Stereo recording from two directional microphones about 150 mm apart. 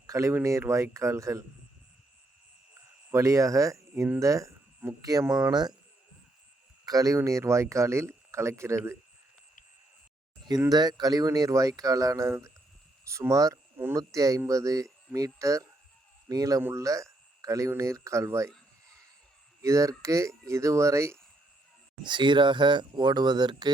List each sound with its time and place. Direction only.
0.1 s speech: 20° right (ahead or behind)
3.1 s speech: 20° right (ahead or behind)
6.8 s speech: 25° right (ahead or behind)
10.6 s speech: 25° right (ahead or behind)
19.6 s speech: 20° right (ahead or behind)
22.0 s speech: 30° right (ahead or behind)